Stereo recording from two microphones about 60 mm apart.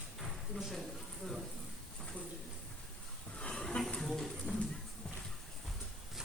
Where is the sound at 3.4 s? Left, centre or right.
Centre.